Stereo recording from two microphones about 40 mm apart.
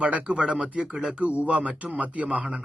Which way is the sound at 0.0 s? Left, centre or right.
Right.